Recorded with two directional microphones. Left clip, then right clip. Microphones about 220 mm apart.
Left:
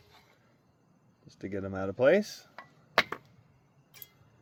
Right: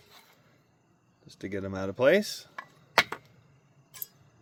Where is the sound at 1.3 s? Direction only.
10° right (ahead or behind).